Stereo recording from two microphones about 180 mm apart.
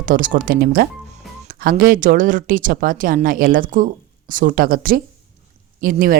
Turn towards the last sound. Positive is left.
turn(degrees=-50)  # may be behind; listen again after turning